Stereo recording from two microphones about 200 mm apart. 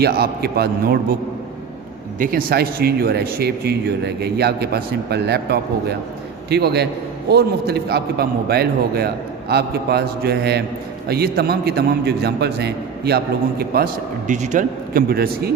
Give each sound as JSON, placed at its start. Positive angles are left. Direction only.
{"t": 0.0, "sound": "a man's voice", "side_deg": -50}
{"t": 2.1, "sound": "a man's voice", "side_deg": -45}